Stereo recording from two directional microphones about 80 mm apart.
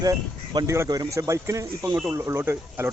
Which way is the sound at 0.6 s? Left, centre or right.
Right.